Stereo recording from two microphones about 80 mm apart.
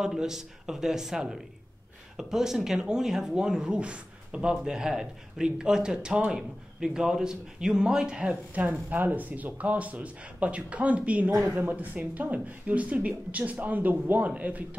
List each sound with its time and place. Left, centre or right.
0.0 s speech: centre